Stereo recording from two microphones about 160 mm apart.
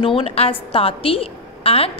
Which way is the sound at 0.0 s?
35° left (ahead or behind).